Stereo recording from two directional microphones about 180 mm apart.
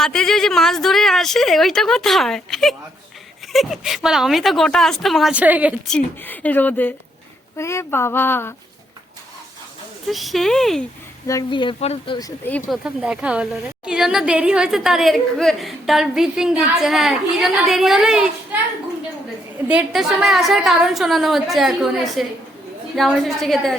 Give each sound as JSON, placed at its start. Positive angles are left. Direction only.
{"t": 0.0, "sound": "a woman's voice", "side_deg": 5}
{"t": 5.9, "sound": "a woman's voice", "side_deg": 10}
{"t": 10.1, "sound": "a woman's voice", "side_deg": 0}
{"t": 11.3, "sound": "speech", "side_deg": 20}
{"t": 12.5, "sound": "a woman's voice", "side_deg": 10}
{"t": 12.8, "sound": "a woman's voice", "side_deg": -5}
{"t": 19.6, "sound": "a woman's voice", "side_deg": -5}